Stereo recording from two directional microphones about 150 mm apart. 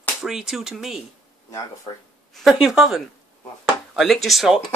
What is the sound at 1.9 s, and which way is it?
Speech, 30° left (ahead or behind).